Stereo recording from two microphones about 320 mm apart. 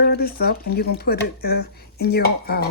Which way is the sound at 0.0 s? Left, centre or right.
Left.